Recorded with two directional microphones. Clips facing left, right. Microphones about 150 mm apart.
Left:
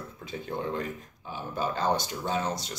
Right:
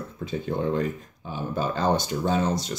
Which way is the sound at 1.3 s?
25° right (ahead or behind).